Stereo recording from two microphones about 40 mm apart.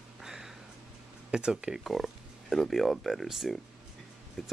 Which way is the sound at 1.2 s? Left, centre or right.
Right.